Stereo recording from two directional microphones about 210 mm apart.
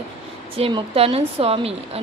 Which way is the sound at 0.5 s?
25° right (ahead or behind).